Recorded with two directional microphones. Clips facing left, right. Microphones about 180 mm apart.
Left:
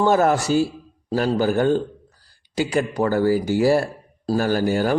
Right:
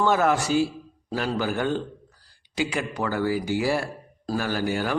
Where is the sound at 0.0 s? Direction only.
40° left (ahead or behind).